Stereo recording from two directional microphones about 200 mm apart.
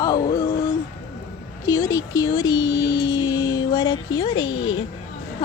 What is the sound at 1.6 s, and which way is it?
Speech, 20° left (ahead or behind).